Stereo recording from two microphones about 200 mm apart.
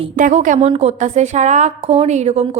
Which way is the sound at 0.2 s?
40° right (ahead or behind).